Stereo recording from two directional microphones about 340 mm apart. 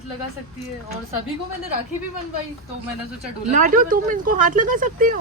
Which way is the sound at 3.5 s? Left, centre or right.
Right.